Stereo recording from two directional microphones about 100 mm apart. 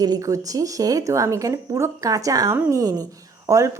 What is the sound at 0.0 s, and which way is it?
A woman's voice, 40° right (ahead or behind).